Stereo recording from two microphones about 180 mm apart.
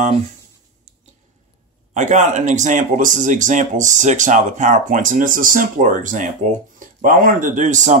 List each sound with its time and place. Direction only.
2.0 s speech: 40° right (ahead or behind)